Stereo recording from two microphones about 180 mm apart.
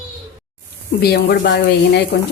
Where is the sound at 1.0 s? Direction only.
65° left (ahead or behind).